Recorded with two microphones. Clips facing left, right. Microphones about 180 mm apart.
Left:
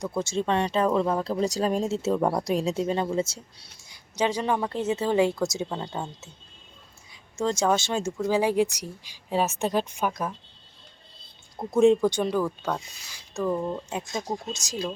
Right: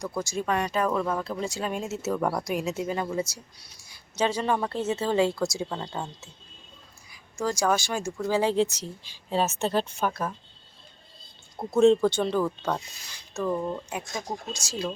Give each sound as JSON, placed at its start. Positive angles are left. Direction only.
{"t": 0.2, "sound": "speech", "side_deg": 25}
{"t": 2.4, "sound": "speech", "side_deg": 30}
{"t": 3.8, "sound": "speech", "side_deg": 15}
{"t": 7.1, "sound": "speech", "side_deg": 25}
{"t": 11.8, "sound": "speech", "side_deg": 10}
{"t": 14.1, "sound": "speech", "side_deg": 25}